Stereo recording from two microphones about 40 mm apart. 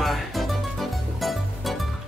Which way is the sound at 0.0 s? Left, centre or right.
Centre.